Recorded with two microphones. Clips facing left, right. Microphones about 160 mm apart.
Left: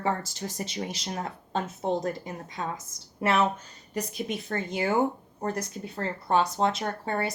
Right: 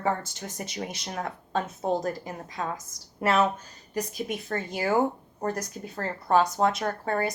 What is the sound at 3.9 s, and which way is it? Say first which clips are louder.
Speech: right 1 dB; 30° left (ahead or behind).